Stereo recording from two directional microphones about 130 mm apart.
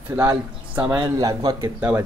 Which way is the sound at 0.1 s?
15° right (ahead or behind).